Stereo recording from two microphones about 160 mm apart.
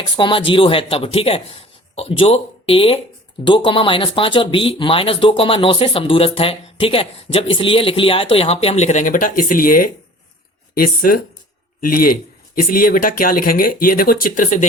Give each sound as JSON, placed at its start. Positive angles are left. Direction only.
{"t": 0.2, "sound": "speech", "side_deg": 30}